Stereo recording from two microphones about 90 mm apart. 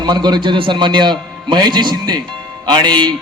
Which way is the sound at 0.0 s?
55° right (ahead or behind).